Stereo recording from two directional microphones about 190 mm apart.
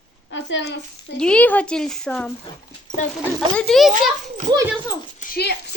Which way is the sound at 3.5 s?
Centre (ahead or behind).